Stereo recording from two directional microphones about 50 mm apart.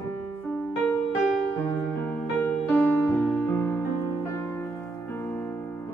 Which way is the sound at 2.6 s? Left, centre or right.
Left.